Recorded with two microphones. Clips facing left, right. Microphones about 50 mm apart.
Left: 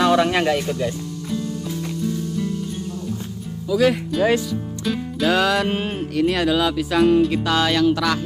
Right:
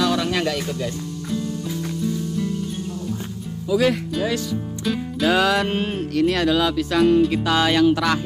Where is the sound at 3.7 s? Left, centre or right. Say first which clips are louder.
Left 2 dB; centre.